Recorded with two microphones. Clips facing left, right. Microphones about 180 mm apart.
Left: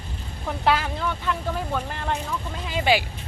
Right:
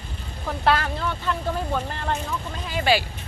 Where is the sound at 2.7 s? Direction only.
15° left (ahead or behind).